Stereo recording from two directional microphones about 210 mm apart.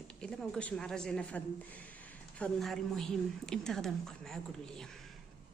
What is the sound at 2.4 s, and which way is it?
A woman's voice, centre (ahead or behind).